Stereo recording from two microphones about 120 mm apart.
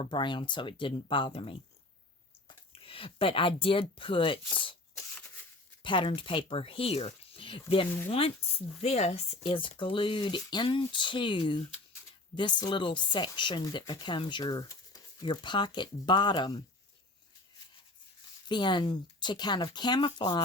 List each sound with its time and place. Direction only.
0.0 s speech: 40° left (ahead or behind)
5.1 s a sound: 15° left (ahead or behind)
5.8 s speech: 45° left (ahead or behind)
18.4 s speech: 40° left (ahead or behind)